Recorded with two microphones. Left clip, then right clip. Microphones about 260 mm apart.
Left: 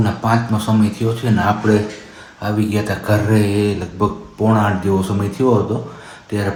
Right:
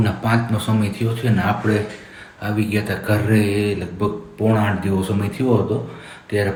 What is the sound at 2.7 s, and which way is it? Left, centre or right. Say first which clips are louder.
Speech: left 2 dB; centre.